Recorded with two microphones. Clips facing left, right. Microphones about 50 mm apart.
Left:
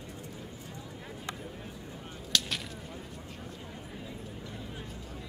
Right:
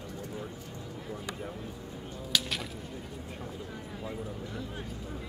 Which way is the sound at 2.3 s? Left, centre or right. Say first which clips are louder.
Even; centre.